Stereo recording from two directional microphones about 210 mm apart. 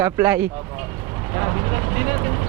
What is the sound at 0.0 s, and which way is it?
Speech, 10° right (ahead or behind).